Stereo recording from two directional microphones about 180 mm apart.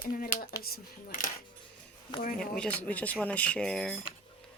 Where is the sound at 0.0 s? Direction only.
50° left (ahead or behind).